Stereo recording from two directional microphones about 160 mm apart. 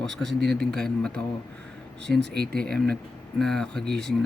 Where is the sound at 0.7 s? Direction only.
5° left (ahead or behind).